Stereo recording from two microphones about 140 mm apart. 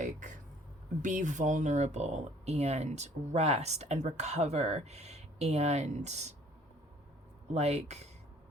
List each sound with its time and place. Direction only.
0.0 s a sound: 65° right (ahead or behind)
1.0 s speech: 60° right (ahead or behind)
7.5 s speech: 50° right (ahead or behind)